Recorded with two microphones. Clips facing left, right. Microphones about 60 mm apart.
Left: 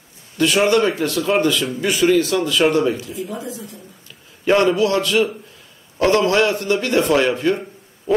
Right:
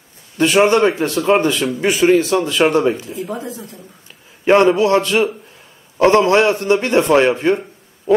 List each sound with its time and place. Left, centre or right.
0.4 s a man's voice: right
4.5 s a man's voice: right